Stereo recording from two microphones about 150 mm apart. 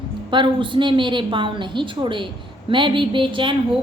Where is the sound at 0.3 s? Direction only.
35° right (ahead or behind).